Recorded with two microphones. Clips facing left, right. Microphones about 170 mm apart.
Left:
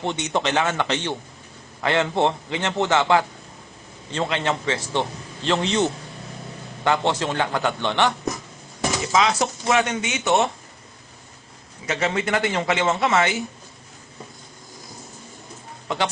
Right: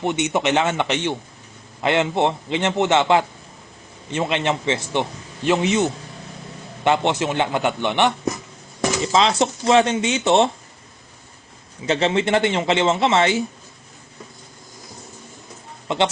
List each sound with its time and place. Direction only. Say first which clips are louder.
0.0 s a man's voice: right 3 dB; 15° right (ahead or behind)
6.8 s a man's voice: right 2 dB; 20° right (ahead or behind)
9.1 s a man's voice: right 2 dB; 25° right (ahead or behind)
11.9 s a man's voice: right 5 dB; 25° right (ahead or behind)
15.9 s a man's voice: right 4 dB; 25° right (ahead or behind)